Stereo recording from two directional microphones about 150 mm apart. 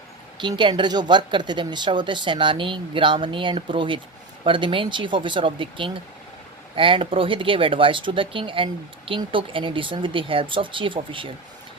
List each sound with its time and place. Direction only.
0.4 s speech: 30° right (ahead or behind)